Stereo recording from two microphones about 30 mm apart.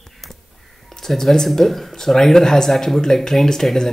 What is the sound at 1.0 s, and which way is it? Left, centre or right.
Speech, centre.